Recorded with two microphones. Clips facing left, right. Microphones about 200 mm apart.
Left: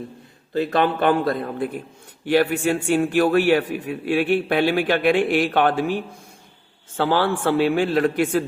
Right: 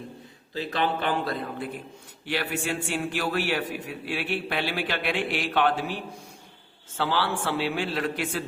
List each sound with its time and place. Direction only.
0.5 s a man's voice: 55° left (ahead or behind)